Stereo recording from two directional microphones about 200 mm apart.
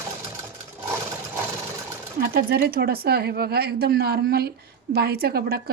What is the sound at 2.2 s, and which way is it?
A woman's voice, 50° right (ahead or behind).